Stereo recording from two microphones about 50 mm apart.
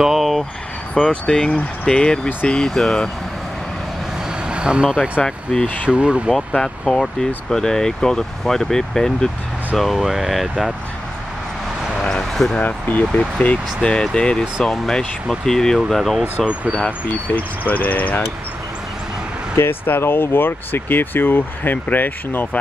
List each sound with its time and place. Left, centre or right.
0.0 s vehicle: centre
1.2 s speech: centre
4.5 s speech: right
5.2 s speech: centre
5.9 s speech: right
6.6 s speech: centre
9.8 s speech: centre
12.0 s basketball bounce: centre
12.6 s speech: left
13.8 s speech: centre
17.4 s speech: left
19.5 s speech: left